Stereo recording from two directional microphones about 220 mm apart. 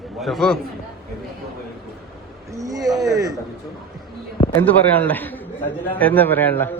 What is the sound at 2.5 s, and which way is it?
Speech, 15° right (ahead or behind).